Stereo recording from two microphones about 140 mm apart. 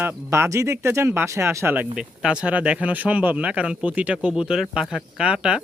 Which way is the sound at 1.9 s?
5° right (ahead or behind).